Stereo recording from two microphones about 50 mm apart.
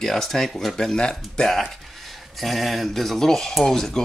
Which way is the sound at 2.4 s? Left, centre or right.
Centre.